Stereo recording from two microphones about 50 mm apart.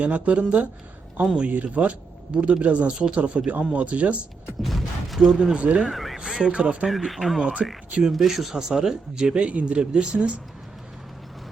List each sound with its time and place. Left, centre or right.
0.0 s speech: right
4.6 s a sound: centre
5.4 s speech: right
5.9 s a sound: centre
6.1 s speech: centre
7.1 s speech: centre; by 10.4 s right